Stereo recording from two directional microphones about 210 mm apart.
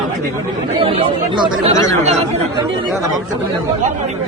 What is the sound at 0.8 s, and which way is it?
Speech, 25° right (ahead or behind).